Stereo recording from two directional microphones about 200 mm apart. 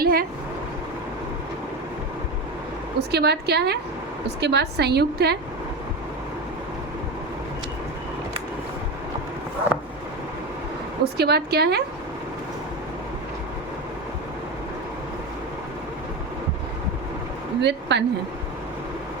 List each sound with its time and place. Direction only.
0.0 s a sound: 45° right (ahead or behind)
3.1 s a woman's voice: 55° right (ahead or behind)
11.0 s a woman's voice: 55° right (ahead or behind)
17.6 s speech: 60° right (ahead or behind)